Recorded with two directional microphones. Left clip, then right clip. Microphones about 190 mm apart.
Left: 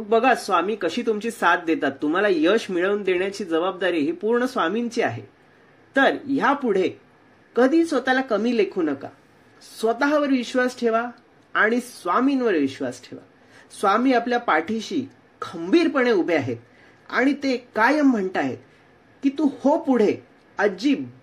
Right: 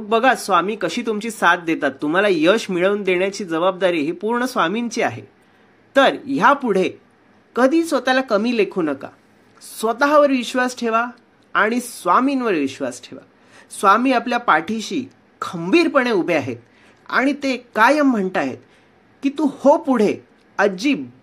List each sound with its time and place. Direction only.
0.1 s speech: 25° right (ahead or behind)